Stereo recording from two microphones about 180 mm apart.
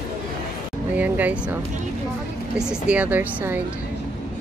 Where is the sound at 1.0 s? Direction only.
10° right (ahead or behind).